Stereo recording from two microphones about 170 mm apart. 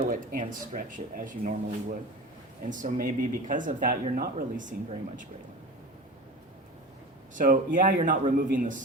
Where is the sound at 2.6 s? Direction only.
50° right (ahead or behind).